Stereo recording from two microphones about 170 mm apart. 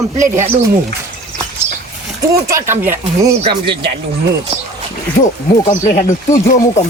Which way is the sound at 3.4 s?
30° right (ahead or behind).